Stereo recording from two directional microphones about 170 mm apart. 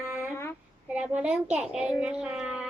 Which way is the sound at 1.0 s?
5° right (ahead or behind).